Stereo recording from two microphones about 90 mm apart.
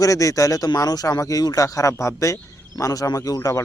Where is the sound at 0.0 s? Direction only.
40° left (ahead or behind).